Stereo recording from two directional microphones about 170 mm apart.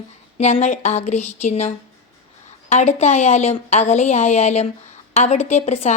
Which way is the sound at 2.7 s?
45° left (ahead or behind).